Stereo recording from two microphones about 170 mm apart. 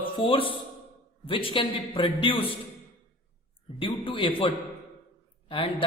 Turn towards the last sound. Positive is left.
turn(degrees=30)  # may be behind; listen again after turning